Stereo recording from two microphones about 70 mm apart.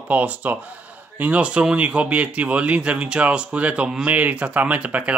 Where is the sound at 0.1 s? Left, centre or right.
Right.